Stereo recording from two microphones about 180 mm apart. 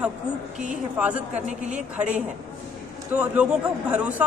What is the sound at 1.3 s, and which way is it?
Speech, 40° right (ahead or behind).